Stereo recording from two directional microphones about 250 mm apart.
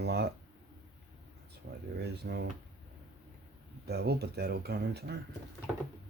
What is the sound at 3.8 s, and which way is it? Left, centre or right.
Speech, right.